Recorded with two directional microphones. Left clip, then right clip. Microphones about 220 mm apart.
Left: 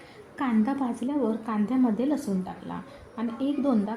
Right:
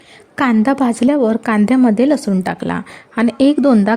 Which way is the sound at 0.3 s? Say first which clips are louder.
Right 13 dB; 45° right (ahead or behind).